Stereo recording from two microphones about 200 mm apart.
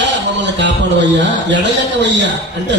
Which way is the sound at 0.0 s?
60° right (ahead or behind).